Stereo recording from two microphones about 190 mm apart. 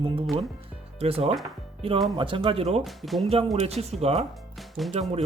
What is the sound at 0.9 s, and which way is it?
Speech, 30° right (ahead or behind).